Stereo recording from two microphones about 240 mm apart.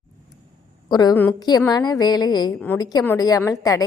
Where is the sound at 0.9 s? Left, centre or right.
Centre.